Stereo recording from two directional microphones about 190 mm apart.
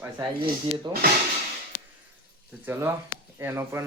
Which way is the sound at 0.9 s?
20° right (ahead or behind).